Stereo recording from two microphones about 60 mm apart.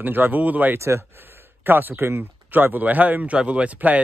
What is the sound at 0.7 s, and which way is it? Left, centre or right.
Speech, right.